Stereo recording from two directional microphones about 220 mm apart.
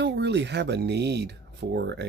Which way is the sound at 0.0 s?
50° right (ahead or behind).